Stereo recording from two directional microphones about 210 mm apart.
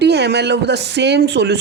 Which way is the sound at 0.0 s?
55° right (ahead or behind).